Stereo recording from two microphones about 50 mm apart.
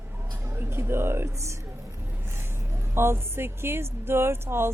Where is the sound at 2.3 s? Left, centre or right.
Right.